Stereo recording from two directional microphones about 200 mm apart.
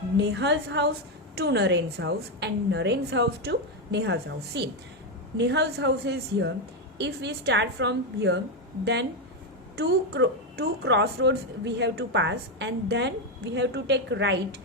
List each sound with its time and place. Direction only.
0.2 s speech: 60° right (ahead or behind)